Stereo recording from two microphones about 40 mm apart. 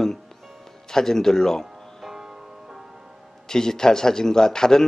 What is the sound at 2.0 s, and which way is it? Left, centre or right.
Music, centre.